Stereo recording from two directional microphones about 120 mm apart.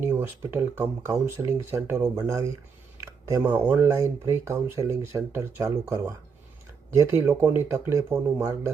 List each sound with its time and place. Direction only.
0.0 s speech: 20° right (ahead or behind)
3.0 s a sound: 25° right (ahead or behind)
3.4 s speech: 15° right (ahead or behind)